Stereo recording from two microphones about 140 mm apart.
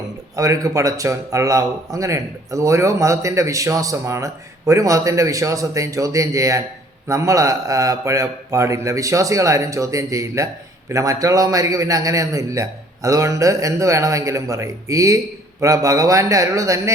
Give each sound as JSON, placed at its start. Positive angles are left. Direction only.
{"t": 0.3, "sound": "a man's voice", "side_deg": -25}